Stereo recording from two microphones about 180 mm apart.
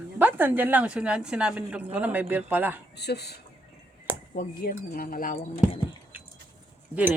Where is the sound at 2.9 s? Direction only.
65° left (ahead or behind).